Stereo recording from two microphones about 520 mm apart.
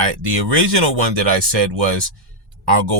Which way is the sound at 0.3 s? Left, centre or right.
Right.